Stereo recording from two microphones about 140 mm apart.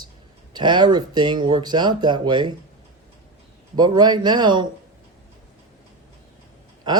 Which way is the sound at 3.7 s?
30° right (ahead or behind).